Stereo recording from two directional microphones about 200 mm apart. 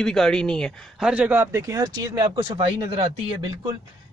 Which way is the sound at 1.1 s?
10° right (ahead or behind).